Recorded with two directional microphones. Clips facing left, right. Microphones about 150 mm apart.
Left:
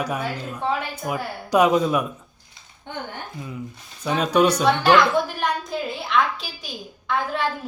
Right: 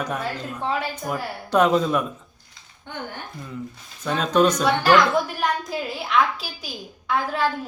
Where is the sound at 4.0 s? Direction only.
10° left (ahead or behind).